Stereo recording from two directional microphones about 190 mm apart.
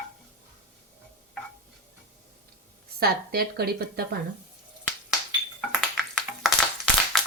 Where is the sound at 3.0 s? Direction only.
55° right (ahead or behind).